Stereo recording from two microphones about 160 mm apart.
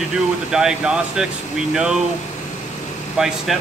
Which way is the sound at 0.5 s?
5° right (ahead or behind).